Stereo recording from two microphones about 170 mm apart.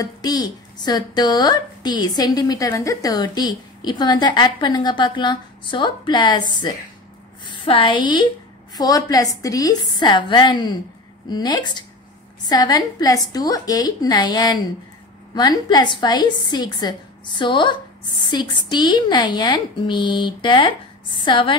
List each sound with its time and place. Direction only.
0.0 s a woman's voice: 25° left (ahead or behind)